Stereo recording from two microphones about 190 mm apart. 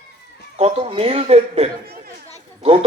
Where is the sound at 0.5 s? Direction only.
30° right (ahead or behind).